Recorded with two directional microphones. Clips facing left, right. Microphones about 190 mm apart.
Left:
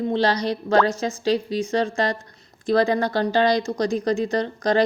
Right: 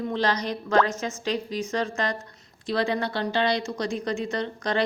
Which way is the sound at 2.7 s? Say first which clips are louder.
Left 6 dB; 45° left (ahead or behind).